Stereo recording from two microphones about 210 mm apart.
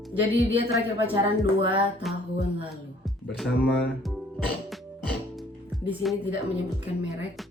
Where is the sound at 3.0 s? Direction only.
Centre (ahead or behind).